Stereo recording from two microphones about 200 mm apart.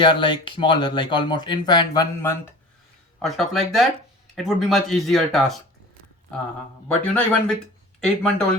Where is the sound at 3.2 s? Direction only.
Centre (ahead or behind).